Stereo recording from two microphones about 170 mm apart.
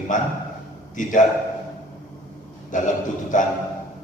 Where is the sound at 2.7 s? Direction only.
50° left (ahead or behind).